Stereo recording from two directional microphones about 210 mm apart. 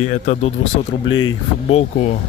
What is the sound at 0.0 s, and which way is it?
Speech, 35° left (ahead or behind).